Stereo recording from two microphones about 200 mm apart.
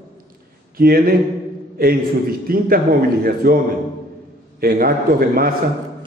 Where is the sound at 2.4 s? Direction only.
45° right (ahead or behind).